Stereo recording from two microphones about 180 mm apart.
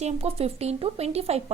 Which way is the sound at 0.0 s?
35° right (ahead or behind).